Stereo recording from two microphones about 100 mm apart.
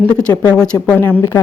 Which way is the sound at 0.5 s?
10° left (ahead or behind).